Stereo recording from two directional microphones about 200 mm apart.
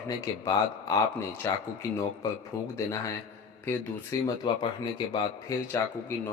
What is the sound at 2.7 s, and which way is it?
A man's voice, 15° left (ahead or behind).